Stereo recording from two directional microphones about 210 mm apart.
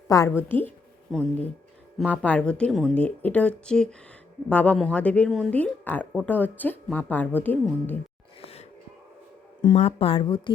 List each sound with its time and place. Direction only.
0.1 s a woman's voice: 15° left (ahead or behind)
8.4 s a sound: 25° left (ahead or behind)
9.6 s speech: 25° left (ahead or behind)